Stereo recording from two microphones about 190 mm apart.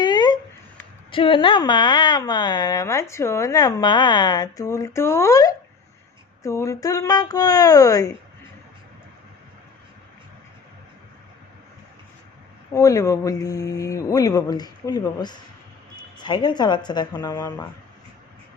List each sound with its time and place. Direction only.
0.0 s a sound: 20° left (ahead or behind)
1.1 s speech: 25° left (ahead or behind)
12.7 s speech: 15° left (ahead or behind)